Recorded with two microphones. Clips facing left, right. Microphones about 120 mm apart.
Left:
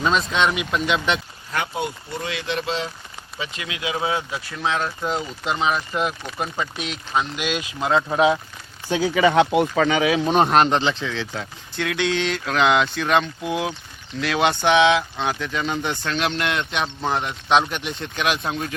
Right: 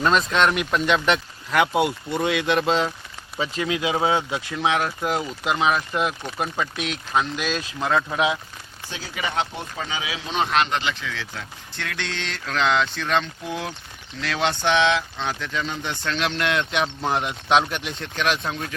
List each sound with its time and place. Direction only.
0.0 s speech: centre (ahead or behind)
1.5 s speech: 85° right; by 2.9 s 50° right (ahead or behind)
3.3 s speech: 35° right (ahead or behind); by 7.6 s 5° left (ahead or behind)
7.8 s speech: 20° left (ahead or behind)
9.3 s speech: 90° left; by 11.4 s 25° left (ahead or behind)
11.8 s speech: 10° left (ahead or behind)